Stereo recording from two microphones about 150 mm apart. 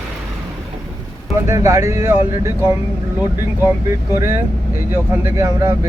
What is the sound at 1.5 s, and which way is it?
Speech, 20° right (ahead or behind).